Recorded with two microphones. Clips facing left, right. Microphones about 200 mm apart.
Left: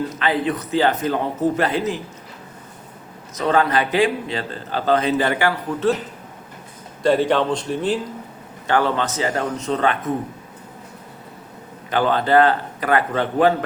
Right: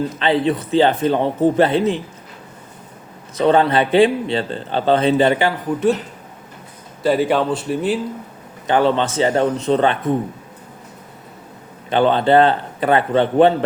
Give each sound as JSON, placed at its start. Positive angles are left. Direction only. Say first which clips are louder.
{"t": 0.2, "sound": "speech", "louder": "right 5 dB", "side_deg": -25}
{"t": 3.3, "sound": "speech", "louder": "right 4 dB", "side_deg": -30}
{"t": 7.0, "sound": "speech", "louder": "right 1 dB", "side_deg": -5}
{"t": 8.6, "sound": "speech", "louder": "right 4 dB", "side_deg": -20}
{"t": 11.9, "sound": "speech", "louder": "right 4 dB", "side_deg": -25}